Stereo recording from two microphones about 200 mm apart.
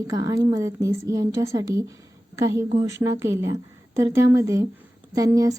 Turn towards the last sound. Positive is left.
turn(degrees=-15)  # may be behind; listen again after turning